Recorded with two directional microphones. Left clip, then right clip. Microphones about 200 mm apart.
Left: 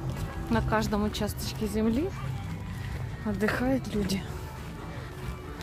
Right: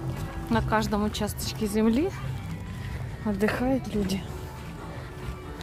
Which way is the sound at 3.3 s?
20° right (ahead or behind).